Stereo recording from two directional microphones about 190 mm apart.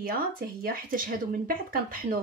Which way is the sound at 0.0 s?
50° right (ahead or behind).